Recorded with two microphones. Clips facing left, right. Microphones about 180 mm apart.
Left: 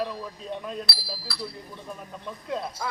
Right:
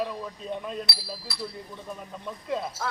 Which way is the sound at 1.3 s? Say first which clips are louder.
Left 1 dB; 20° right (ahead or behind).